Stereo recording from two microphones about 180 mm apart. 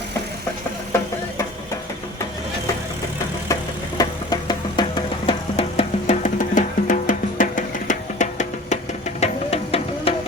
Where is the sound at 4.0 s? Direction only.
20° left (ahead or behind).